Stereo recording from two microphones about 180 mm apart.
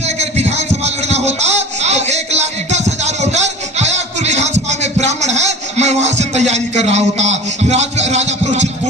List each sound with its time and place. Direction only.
0.0 s music: 35° right (ahead or behind)